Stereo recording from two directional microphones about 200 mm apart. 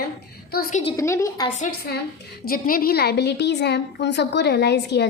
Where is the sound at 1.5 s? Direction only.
40° left (ahead or behind).